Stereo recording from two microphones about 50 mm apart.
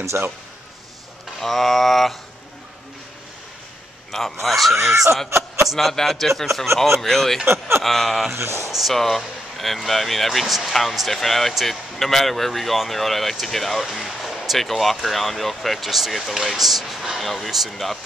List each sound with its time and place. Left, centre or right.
0.1 s a man's voice: right
1.4 s speech: centre
4.1 s speech: centre
5.3 s a sound: right
5.7 s speech: centre
8.5 s speech: left
8.7 s speech: centre